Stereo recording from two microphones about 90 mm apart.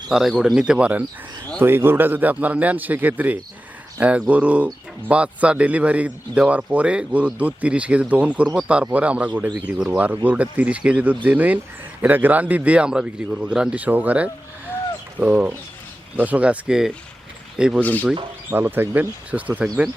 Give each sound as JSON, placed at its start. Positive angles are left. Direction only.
{"t": 0.1, "sound": "speech", "side_deg": -5}
{"t": 1.6, "sound": "a man's voice", "side_deg": -25}
{"t": 17.8, "sound": "speech", "side_deg": 15}
{"t": 18.5, "sound": "a man's voice", "side_deg": -25}